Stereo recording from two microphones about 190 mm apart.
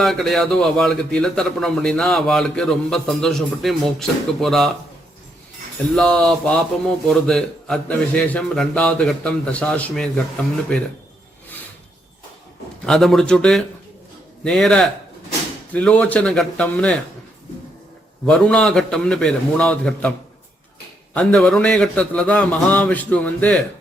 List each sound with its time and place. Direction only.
0.0 s a man's voice: centre (ahead or behind)
6.0 s a man's voice: 5° left (ahead or behind)
12.8 s a man's voice: centre (ahead or behind)
18.3 s a man's voice: 5° left (ahead or behind)